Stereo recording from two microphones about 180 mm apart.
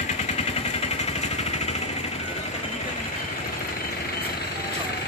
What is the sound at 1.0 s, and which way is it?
Vehicle, 35° left (ahead or behind).